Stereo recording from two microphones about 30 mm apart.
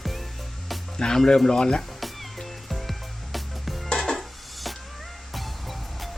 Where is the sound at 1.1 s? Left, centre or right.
Centre.